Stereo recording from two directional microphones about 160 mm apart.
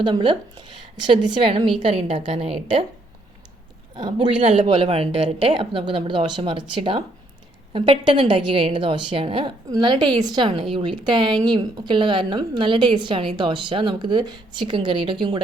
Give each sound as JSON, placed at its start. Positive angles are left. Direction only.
{"t": 0.0, "sound": "a woman's voice", "side_deg": -30}
{"t": 3.9, "sound": "speech", "side_deg": -30}
{"t": 4.5, "sound": "a woman's voice", "side_deg": -45}